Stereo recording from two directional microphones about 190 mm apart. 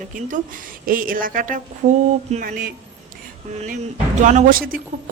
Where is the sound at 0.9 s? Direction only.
45° right (ahead or behind).